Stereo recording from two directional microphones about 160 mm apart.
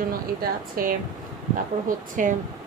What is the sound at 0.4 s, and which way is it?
Speech, 65° right (ahead or behind).